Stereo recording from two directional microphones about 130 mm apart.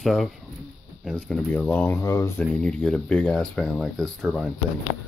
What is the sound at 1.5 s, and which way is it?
Speech, 15° left (ahead or behind).